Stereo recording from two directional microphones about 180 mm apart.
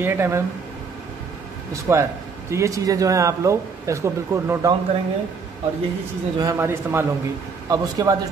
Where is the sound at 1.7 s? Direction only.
15° right (ahead or behind).